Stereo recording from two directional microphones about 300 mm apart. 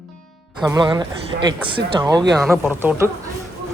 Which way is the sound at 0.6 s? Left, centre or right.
Centre.